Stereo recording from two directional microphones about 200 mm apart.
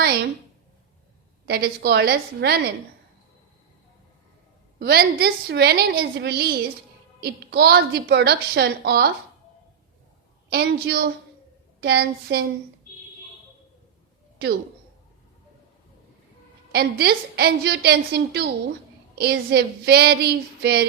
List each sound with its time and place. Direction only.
1.5 s a woman's voice: 55° right (ahead or behind)
4.8 s a woman's voice: 50° right (ahead or behind)
10.5 s a woman's voice: 55° right (ahead or behind)
16.7 s a woman's voice: 50° right (ahead or behind)